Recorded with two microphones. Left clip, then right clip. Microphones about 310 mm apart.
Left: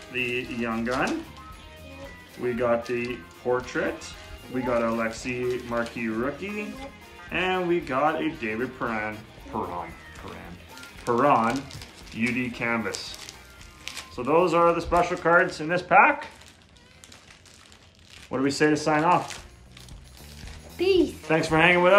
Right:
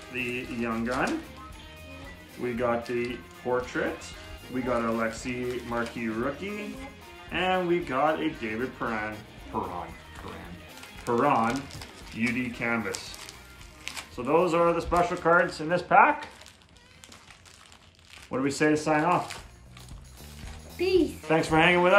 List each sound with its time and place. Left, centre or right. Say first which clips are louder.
0.1 s speech: left 4 dB; centre
2.4 s speech: left 3 dB; centre
10.7 s music: left 3 dB; centre
11.5 s speech: left 2 dB; centre
12.4 s speech: left 2 dB; centre
12.9 s music: left 2 dB; centre
14.1 s speech: left 3 dB; centre
18.3 s speech: left 2 dB; centre
20.7 s a woman's voice: left 3 dB; centre